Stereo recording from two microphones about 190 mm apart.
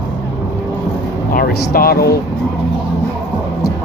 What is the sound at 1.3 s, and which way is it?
Speech, 55° left (ahead or behind).